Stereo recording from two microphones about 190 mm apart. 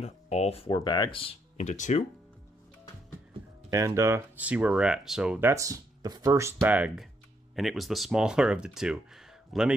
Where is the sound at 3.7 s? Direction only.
15° right (ahead or behind).